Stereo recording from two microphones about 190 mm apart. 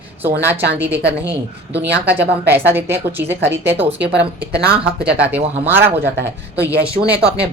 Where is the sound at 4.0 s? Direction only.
60° right (ahead or behind).